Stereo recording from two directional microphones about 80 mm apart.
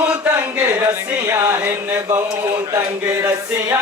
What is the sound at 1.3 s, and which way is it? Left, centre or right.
Chant, right.